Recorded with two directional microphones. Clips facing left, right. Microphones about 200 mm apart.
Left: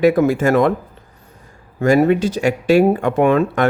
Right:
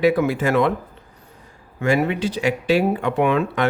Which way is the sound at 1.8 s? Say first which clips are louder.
Left 6 dB; 40° left (ahead or behind).